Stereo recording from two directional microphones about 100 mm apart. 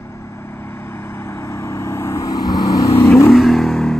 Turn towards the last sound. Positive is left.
turn(degrees=5)  # may be behind; listen again after turning